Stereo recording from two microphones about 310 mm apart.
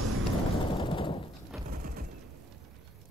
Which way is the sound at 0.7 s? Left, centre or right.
Centre.